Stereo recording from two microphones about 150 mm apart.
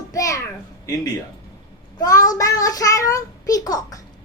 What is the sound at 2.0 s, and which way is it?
Child singing, 25° left (ahead or behind).